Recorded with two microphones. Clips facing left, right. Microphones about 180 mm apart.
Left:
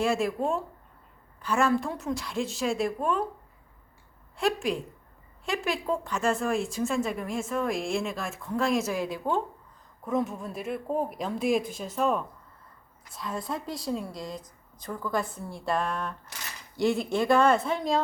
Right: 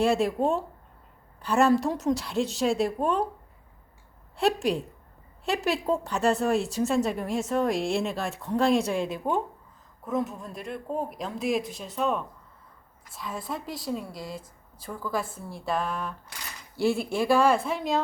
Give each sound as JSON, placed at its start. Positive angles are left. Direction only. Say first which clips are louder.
{"t": 0.0, "sound": "a woman's voice", "louder": "right 3 dB", "side_deg": -35}
{"t": 4.4, "sound": "a woman's voice", "louder": "right 3 dB", "side_deg": -35}
{"t": 10.0, "sound": "a woman's voice", "louder": "left 1 dB", "side_deg": 0}
{"t": 16.9, "sound": "speech", "louder": "even", "side_deg": 20}
{"t": 17.2, "sound": "a woman's voice", "louder": "even", "side_deg": -10}